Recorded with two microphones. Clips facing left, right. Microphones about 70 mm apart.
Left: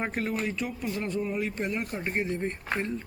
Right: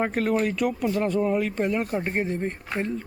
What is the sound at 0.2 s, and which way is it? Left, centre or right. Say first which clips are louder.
Speech: right 7 dB; right.